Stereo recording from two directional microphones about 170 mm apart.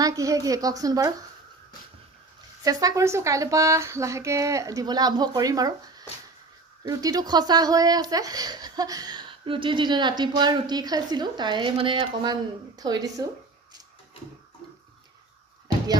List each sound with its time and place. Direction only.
0.0 s speech: 20° right (ahead or behind)
2.6 s speech: 20° right (ahead or behind)